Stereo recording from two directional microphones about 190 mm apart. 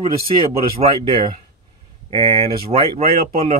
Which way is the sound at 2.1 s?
30° right (ahead or behind).